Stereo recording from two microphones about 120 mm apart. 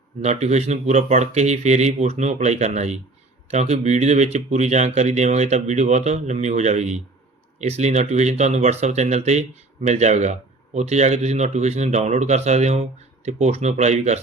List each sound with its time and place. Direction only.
0.2 s speech: 70° right (ahead or behind)